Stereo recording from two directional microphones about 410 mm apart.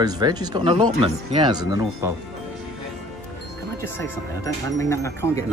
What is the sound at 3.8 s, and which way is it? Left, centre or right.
Speech, centre.